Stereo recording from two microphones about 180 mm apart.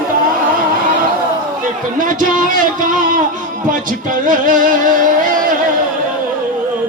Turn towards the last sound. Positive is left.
turn(degrees=-50)  # may be behind; listen again after turning